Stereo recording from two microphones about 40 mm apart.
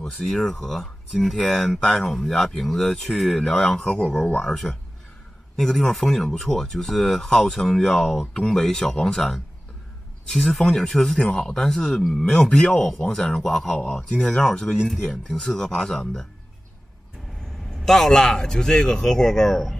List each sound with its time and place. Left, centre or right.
0.1 s speech: centre
1.8 s speech: centre
2.1 s speech: centre
10.6 s speech: centre
11.1 s speech: left
17.8 s speech: centre